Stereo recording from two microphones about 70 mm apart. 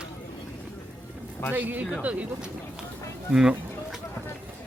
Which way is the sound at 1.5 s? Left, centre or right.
Right.